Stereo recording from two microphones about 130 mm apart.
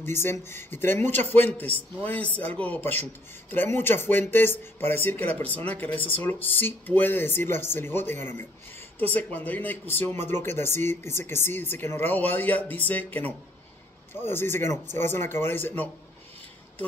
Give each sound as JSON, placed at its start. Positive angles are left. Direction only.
{"t": 0.0, "sound": "speech", "side_deg": 20}